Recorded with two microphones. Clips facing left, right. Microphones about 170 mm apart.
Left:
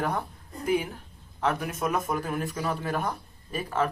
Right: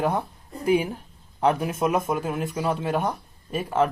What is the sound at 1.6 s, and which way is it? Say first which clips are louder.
A man's voice: right 5 dB; 30° right (ahead or behind).